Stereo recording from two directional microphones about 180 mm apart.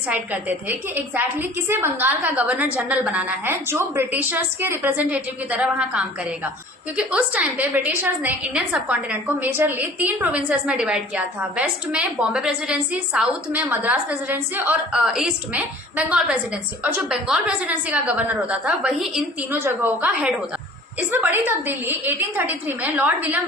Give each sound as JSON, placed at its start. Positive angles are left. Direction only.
{"t": 0.1, "sound": "a woman's voice", "side_deg": -10}